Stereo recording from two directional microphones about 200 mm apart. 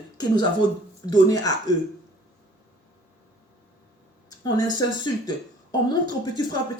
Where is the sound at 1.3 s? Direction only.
20° left (ahead or behind).